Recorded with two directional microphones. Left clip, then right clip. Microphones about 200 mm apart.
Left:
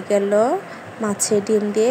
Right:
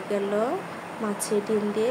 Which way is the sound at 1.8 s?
35° left (ahead or behind).